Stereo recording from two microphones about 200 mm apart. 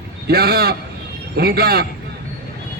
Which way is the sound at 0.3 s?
50° right (ahead or behind).